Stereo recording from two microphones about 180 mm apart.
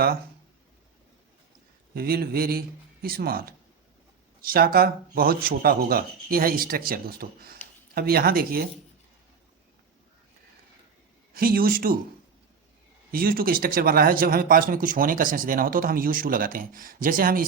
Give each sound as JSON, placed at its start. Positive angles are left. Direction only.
{"t": 1.9, "sound": "speech", "side_deg": -60}
{"t": 11.3, "sound": "speech", "side_deg": -55}
{"t": 13.1, "sound": "speech", "side_deg": -55}